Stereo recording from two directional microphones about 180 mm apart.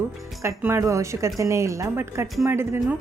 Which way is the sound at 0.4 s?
15° right (ahead or behind).